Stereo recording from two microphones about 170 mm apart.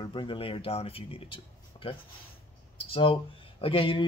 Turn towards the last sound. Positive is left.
turn(degrees=30)  # may be behind; listen again after turning